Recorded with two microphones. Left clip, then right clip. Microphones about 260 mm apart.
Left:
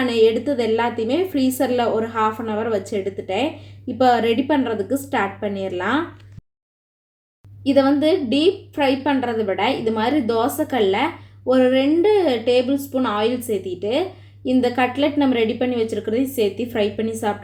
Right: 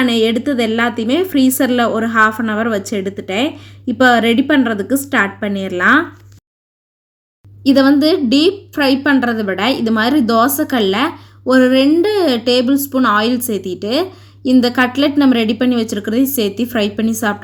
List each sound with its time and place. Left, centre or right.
0.2 s speech: right
7.7 s speech: right